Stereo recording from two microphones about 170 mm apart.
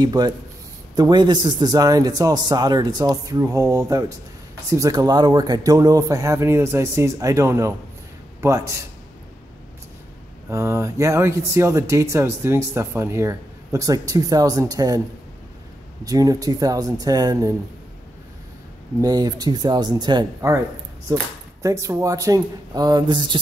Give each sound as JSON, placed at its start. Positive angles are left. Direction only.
{"t": 0.0, "sound": "a man's voice", "side_deg": -25}
{"t": 10.5, "sound": "speech", "side_deg": -15}
{"t": 16.0, "sound": "a man's voice", "side_deg": -20}
{"t": 18.9, "sound": "a man's voice", "side_deg": -20}